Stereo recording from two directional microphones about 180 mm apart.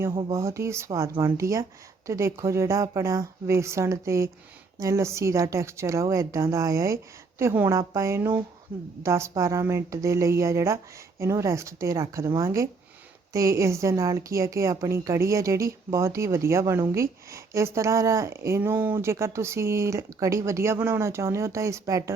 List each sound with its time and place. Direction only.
0.1 s speech: 30° right (ahead or behind)
0.3 s a woman's voice: 15° right (ahead or behind)